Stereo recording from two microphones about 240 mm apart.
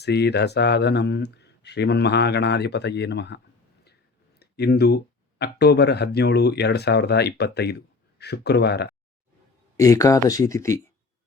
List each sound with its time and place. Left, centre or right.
0.0 s speech: left
4.4 s a sound: left
5.4 s speech: left
9.7 s speech: centre